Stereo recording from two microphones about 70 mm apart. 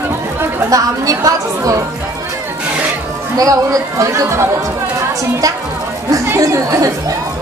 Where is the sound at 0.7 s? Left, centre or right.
Right.